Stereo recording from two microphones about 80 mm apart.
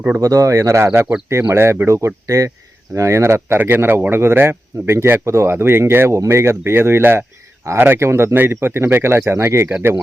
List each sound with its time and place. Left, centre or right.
0.2 s speech: right